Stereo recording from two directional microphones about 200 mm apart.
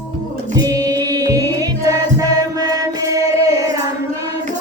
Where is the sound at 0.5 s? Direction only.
20° right (ahead or behind).